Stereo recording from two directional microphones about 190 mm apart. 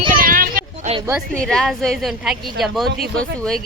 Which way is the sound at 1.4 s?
5° left (ahead or behind).